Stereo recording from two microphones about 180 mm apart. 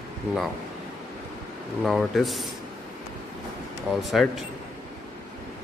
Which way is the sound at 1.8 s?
Centre (ahead or behind).